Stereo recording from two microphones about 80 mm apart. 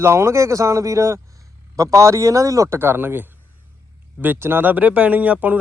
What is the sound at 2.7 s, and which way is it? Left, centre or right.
Speech, right.